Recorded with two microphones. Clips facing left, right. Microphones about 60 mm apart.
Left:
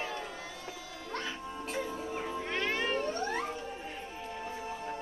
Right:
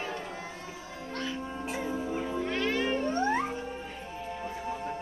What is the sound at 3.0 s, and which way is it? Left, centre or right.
Music, right.